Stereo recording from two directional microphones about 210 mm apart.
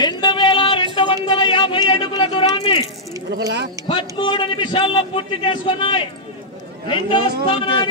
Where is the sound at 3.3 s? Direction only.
55° right (ahead or behind).